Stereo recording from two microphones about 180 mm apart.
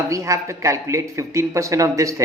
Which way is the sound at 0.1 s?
15° right (ahead or behind).